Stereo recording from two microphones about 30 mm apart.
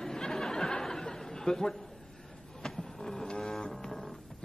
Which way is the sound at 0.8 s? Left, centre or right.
Centre.